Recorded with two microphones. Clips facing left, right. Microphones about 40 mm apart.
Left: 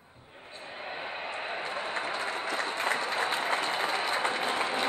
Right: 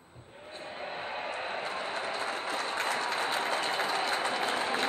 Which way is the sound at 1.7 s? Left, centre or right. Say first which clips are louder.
Left 1 dB; centre.